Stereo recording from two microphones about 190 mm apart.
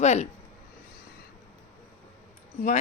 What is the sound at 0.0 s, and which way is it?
Speech, 35° left (ahead or behind).